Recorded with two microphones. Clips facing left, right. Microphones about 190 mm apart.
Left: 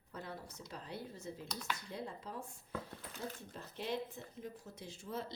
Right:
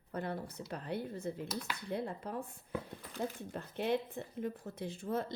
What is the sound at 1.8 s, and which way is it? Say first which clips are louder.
Speech: right 7 dB; 60° right (ahead or behind).